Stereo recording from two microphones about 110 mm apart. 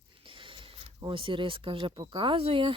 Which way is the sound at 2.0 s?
45° right (ahead or behind).